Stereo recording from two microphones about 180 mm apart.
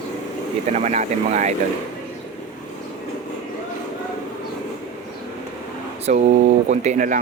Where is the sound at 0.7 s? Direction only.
40° right (ahead or behind).